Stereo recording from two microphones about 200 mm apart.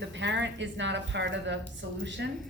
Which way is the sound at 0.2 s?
60° right (ahead or behind).